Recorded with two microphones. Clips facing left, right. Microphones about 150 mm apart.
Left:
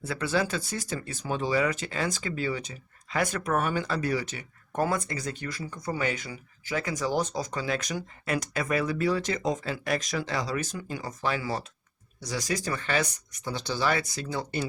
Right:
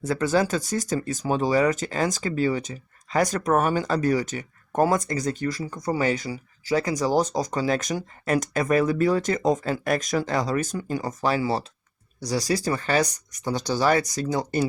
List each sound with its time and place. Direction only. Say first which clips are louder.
0.0 s speech: right 6 dB; 45° right (ahead or behind)